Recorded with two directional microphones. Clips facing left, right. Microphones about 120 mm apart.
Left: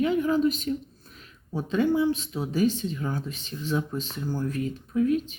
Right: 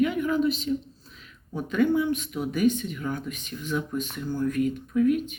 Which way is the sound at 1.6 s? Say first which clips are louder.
Even; 30° left (ahead or behind).